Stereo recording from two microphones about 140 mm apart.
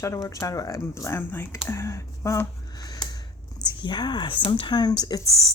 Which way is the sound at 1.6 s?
20° left (ahead or behind).